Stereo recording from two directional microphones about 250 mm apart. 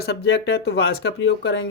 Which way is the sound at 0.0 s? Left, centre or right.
Left.